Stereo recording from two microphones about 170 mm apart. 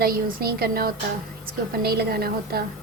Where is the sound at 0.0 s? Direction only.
60° right (ahead or behind).